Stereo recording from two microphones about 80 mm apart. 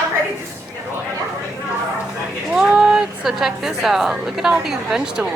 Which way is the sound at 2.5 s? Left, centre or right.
Centre.